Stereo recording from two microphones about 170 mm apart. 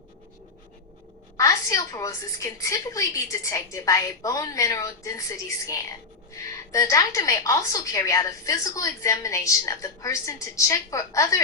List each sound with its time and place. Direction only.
1.4 s a woman's voice: 20° left (ahead or behind)